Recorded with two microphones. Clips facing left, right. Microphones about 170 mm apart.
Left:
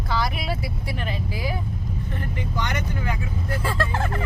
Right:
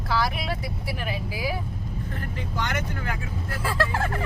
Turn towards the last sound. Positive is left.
turn(degrees=-5)  # may be behind; listen again after turning